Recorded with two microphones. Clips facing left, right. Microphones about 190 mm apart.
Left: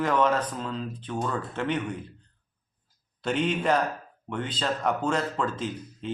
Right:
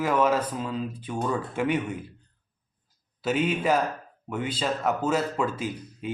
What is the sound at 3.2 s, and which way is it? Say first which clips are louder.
Speech: right 1 dB; 5° right (ahead or behind).